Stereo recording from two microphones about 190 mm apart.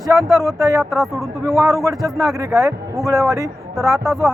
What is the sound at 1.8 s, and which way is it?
Speech, 15° right (ahead or behind).